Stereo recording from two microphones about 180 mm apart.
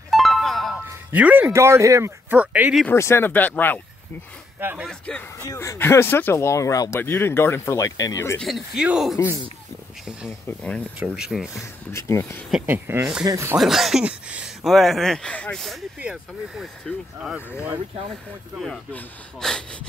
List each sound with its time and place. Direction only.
0.1 s music: centre (ahead or behind)
0.8 s speech: 10° right (ahead or behind)
2.9 s speech: 15° left (ahead or behind)
4.6 s speech: 10° right (ahead or behind)
4.8 s speech: 5° left (ahead or behind)
5.5 s speech: 15° left (ahead or behind)
8.4 s speech: centre (ahead or behind)
11.9 s speech: 15° left (ahead or behind)
12.4 s speech: 5° right (ahead or behind)
13.6 s speech: centre (ahead or behind)
18.6 s speech: 5° left (ahead or behind)